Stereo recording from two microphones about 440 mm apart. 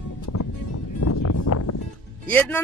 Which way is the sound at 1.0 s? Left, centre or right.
Left.